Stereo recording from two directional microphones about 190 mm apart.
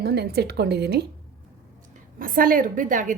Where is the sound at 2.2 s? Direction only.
50° right (ahead or behind).